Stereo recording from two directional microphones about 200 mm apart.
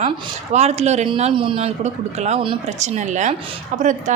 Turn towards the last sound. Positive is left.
turn(degrees=-40)  # may be behind; listen again after turning